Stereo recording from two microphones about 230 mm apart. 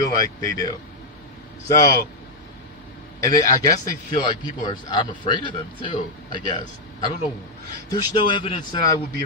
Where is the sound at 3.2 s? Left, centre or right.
Centre.